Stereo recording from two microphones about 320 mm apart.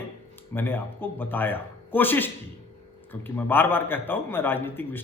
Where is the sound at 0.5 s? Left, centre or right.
Centre.